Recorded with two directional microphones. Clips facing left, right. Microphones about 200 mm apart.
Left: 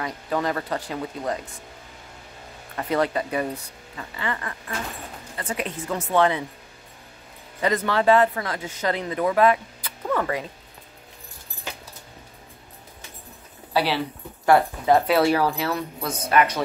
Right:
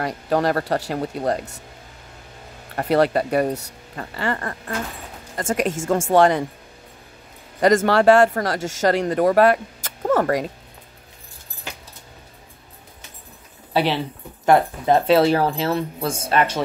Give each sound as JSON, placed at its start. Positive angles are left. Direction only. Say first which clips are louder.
{"t": 0.0, "sound": "speech", "louder": "right 5 dB", "side_deg": -70}
{"t": 0.9, "sound": "speech", "louder": "right 5 dB", "side_deg": -40}
{"t": 1.3, "sound": "speech", "louder": "right 5 dB", "side_deg": -70}
{"t": 2.9, "sound": "speech", "louder": "right 6 dB", "side_deg": -65}
{"t": 3.9, "sound": "speech", "louder": "right 5 dB", "side_deg": -45}
{"t": 7.9, "sound": "a woman's voice", "louder": "right 1 dB", "side_deg": -85}
{"t": 9.0, "sound": "speech", "louder": "right 6 dB", "side_deg": -45}
{"t": 9.3, "sound": "speech", "louder": "right 1 dB", "side_deg": -70}
{"t": 10.0, "sound": "a sound", "louder": "right 6 dB", "side_deg": -45}
{"t": 13.7, "sound": "speech", "louder": "right 2 dB", "side_deg": -20}